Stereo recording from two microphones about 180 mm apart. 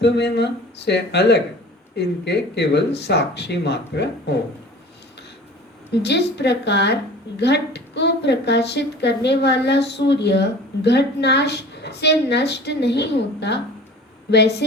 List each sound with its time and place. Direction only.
0.0 s a woman's voice: 70° left (ahead or behind)
5.9 s a woman's voice: 70° left (ahead or behind)